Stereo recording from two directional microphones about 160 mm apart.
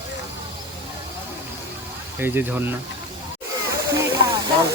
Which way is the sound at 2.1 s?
15° right (ahead or behind).